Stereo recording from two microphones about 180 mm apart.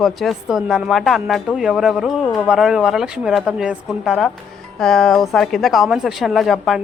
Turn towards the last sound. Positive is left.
turn(degrees=0)  # may be behind; listen again after turning